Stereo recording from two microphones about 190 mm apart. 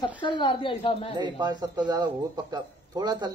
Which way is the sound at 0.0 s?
25° left (ahead or behind).